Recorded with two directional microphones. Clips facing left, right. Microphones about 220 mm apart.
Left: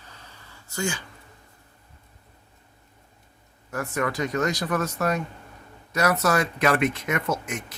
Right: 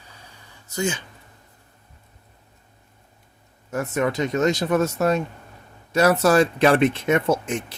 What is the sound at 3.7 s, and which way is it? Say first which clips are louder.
Speech: right 4 dB; 20° right (ahead or behind).